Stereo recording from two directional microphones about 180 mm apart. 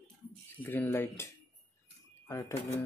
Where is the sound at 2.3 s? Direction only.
15° left (ahead or behind).